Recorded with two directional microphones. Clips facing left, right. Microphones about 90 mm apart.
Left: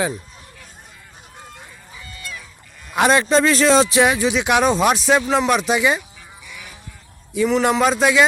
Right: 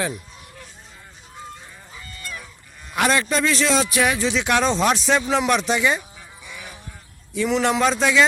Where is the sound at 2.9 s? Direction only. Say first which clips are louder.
Left 5 dB; 20° left (ahead or behind).